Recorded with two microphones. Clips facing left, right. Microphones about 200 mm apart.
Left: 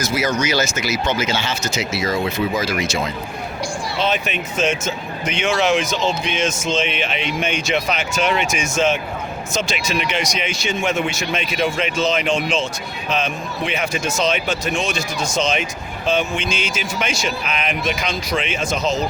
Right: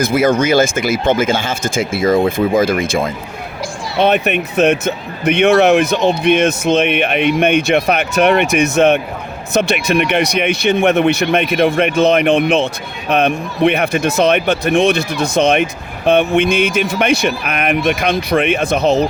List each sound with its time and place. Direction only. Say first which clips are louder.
0.0 s speech: right 7 dB; 55° right (ahead or behind)